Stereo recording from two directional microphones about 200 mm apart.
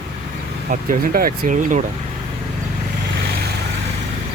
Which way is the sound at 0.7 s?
45° right (ahead or behind).